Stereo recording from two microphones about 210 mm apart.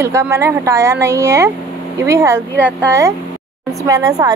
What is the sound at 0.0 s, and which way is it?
A woman's voice, 15° right (ahead or behind).